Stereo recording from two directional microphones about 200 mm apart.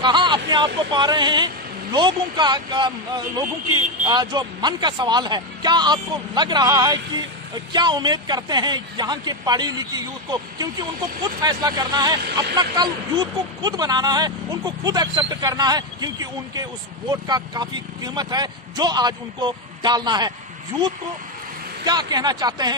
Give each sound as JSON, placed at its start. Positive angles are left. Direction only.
{"t": 0.0, "sound": "speech", "side_deg": -25}
{"t": 4.0, "sound": "speech", "side_deg": -20}
{"t": 21.8, "sound": "speech", "side_deg": -20}